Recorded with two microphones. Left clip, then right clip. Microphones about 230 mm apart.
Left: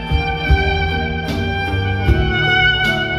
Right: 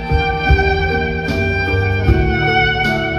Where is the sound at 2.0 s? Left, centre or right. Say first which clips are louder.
Left 2 dB; left.